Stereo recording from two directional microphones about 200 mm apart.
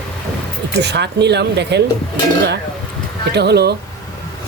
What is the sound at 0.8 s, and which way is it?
Speech, 55° right (ahead or behind).